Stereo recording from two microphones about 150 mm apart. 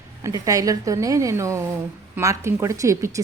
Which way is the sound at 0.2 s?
20° right (ahead or behind).